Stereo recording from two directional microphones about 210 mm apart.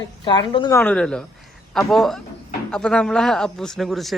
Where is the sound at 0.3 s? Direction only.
20° left (ahead or behind).